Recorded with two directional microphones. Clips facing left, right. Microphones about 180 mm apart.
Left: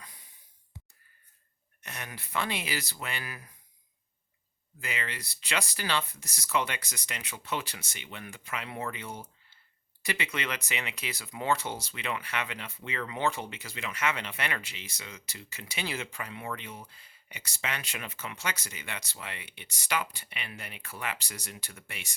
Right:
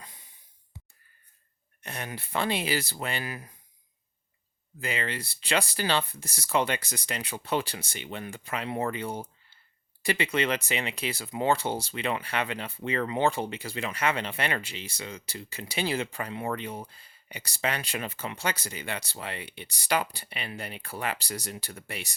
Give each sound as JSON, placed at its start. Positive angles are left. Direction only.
{"t": 0.0, "sound": "a sound", "side_deg": -25}
{"t": 1.8, "sound": "speech", "side_deg": -30}
{"t": 4.8, "sound": "speech", "side_deg": -30}